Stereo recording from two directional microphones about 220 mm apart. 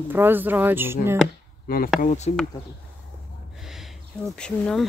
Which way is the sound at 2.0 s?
30° left (ahead or behind).